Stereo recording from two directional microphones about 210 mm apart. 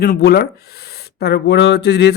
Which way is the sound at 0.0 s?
45° left (ahead or behind).